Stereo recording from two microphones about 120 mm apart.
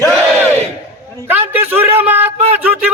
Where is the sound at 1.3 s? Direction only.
15° right (ahead or behind).